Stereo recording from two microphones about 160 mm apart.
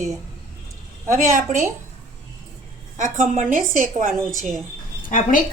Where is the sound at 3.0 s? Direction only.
50° right (ahead or behind).